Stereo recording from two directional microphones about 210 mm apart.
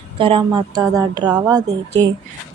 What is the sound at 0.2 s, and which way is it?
Speech, 25° right (ahead or behind).